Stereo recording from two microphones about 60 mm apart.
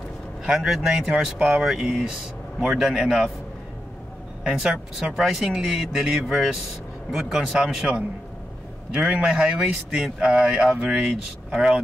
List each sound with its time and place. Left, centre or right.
0.5 s speech: centre
4.5 s speech: centre